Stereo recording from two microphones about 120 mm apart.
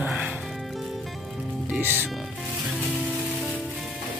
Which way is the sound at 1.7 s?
15° right (ahead or behind).